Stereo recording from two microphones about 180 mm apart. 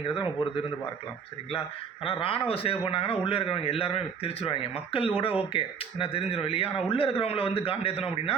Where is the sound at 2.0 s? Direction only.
30° left (ahead or behind).